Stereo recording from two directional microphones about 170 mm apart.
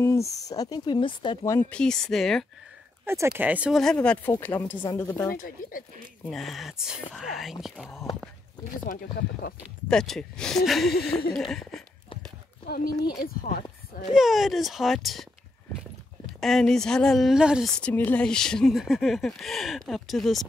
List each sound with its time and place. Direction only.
0.0 s speech: 15° left (ahead or behind)
1.5 s speech: 10° left (ahead or behind)
3.1 s speech: 15° right (ahead or behind); by 5.3 s 15° left (ahead or behind)
5.3 s speech: 55° left (ahead or behind)
6.3 s speech: centre (ahead or behind)
8.6 s speech: 55° left (ahead or behind)
9.8 s speech: 5° left (ahead or behind)
12.6 s speech: 60° left (ahead or behind)
14.1 s speech: centre (ahead or behind)
16.3 s speech: centre (ahead or behind)
17.7 s speech: 10° left (ahead or behind)